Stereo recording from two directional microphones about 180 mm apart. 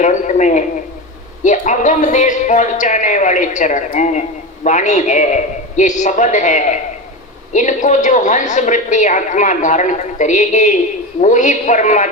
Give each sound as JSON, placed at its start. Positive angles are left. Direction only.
{"t": 0.0, "sound": "a man's voice", "side_deg": 45}